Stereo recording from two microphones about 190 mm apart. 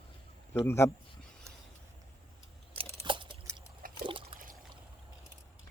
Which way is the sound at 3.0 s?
25° right (ahead or behind).